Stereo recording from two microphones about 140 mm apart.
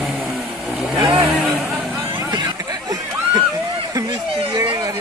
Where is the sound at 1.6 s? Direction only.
Centre (ahead or behind).